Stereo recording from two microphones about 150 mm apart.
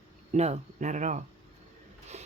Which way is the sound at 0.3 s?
45° right (ahead or behind).